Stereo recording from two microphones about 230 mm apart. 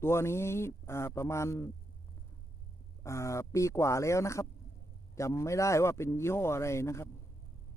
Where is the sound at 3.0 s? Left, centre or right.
Centre.